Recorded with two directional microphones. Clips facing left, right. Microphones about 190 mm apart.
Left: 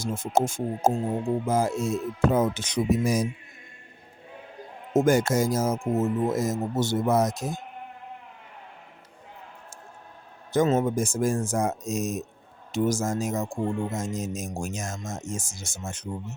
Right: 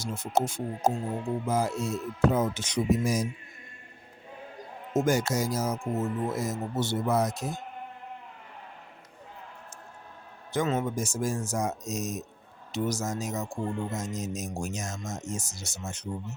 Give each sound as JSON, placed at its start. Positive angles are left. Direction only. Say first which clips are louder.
{"t": 0.0, "sound": "speech", "louder": "left 3 dB", "side_deg": 50}
{"t": 4.9, "sound": "speech", "louder": "left 5 dB", "side_deg": 55}
{"t": 10.5, "sound": "speech", "louder": "left 6 dB", "side_deg": 40}